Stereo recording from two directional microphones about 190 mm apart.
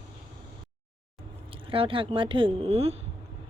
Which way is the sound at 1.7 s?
30° right (ahead or behind).